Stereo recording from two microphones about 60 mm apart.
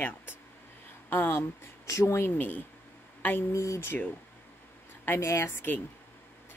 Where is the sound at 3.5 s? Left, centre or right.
Left.